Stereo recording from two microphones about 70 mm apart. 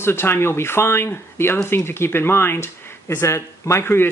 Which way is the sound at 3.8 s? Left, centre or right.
Left.